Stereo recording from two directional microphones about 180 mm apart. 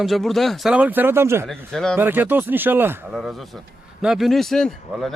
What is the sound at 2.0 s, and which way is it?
Speech, 10° right (ahead or behind).